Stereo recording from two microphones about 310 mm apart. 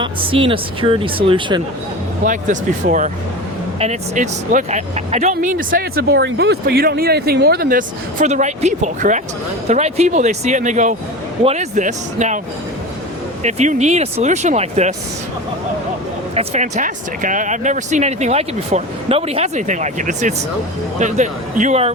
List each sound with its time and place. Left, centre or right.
0.0 s speech: centre
13.4 s speech: right
16.3 s speech: centre